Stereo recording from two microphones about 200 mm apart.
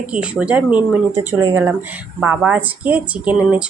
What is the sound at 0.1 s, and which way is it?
A woman's voice, 5° right (ahead or behind).